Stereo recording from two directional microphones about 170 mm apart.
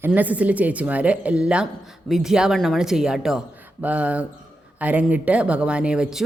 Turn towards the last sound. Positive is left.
turn(degrees=-5)  # may be behind; listen again after turning